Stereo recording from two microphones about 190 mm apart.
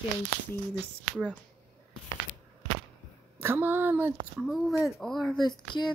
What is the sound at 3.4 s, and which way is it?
Speech, 10° right (ahead or behind).